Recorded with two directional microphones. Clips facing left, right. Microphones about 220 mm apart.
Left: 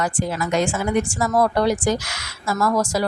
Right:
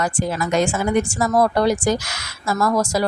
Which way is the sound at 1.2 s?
40° right (ahead or behind).